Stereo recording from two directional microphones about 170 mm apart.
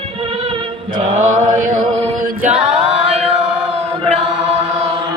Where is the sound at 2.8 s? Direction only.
40° right (ahead or behind).